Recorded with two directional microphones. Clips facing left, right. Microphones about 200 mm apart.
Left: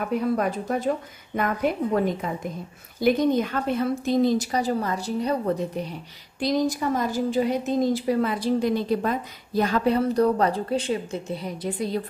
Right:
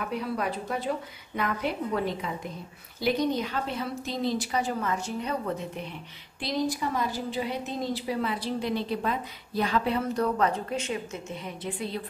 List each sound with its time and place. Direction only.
0.0 s a woman's voice: 45° left (ahead or behind)